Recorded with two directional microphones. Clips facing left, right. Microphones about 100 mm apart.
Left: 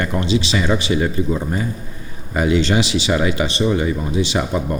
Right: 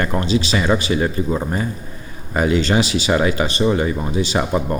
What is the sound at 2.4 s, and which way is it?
Speech, 40° right (ahead or behind).